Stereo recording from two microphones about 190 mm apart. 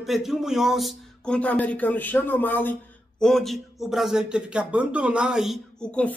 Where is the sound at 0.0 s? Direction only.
Centre (ahead or behind).